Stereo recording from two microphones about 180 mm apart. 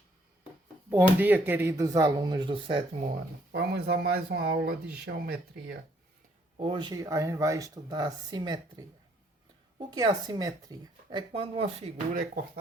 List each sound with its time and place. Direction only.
0.9 s speech: 10° right (ahead or behind); by 3.1 s 30° right (ahead or behind)
3.5 s speech: 65° right (ahead or behind)
6.6 s speech: 30° right (ahead or behind)